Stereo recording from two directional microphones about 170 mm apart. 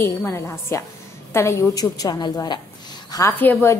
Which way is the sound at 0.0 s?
15° left (ahead or behind).